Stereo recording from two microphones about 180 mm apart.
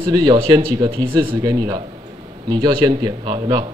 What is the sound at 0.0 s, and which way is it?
A man's voice, 25° right (ahead or behind).